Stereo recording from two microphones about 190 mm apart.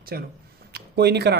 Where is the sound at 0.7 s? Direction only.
60° right (ahead or behind).